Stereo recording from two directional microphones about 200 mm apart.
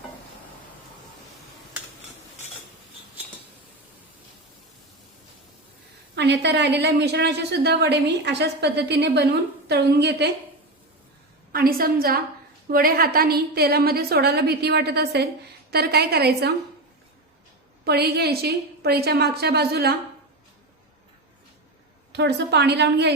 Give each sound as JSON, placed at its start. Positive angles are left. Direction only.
{"t": 6.1, "sound": "a woman's voice", "side_deg": -60}
{"t": 11.5, "sound": "a woman's voice", "side_deg": -45}
{"t": 17.8, "sound": "a woman's voice", "side_deg": -55}
{"t": 22.1, "sound": "a woman's voice", "side_deg": -60}